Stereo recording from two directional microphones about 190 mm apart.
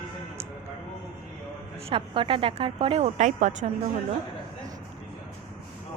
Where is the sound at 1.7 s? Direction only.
30° right (ahead or behind).